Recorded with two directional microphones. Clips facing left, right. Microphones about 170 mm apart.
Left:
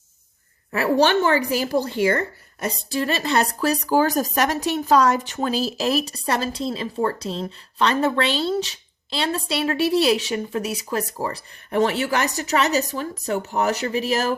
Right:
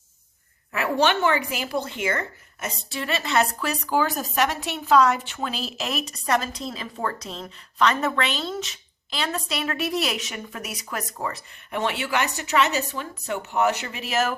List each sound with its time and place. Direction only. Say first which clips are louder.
0.7 s speech: left 4 dB; 35° left (ahead or behind)